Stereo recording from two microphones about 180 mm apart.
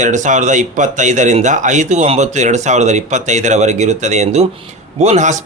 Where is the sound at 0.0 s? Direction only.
45° right (ahead or behind).